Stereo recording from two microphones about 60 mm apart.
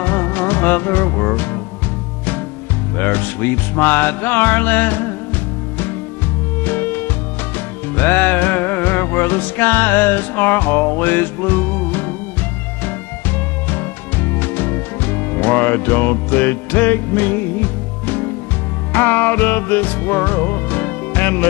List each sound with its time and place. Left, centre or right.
0.0 s music: left
3.0 s speech: left
6.6 s music: left
13.7 s music: left